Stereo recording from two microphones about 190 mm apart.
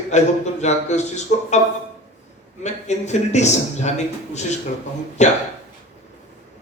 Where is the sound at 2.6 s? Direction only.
35° left (ahead or behind).